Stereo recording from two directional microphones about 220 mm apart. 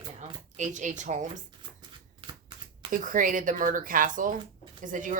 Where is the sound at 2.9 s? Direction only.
35° right (ahead or behind).